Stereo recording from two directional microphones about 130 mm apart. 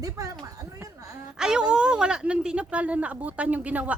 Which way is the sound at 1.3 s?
5° right (ahead or behind).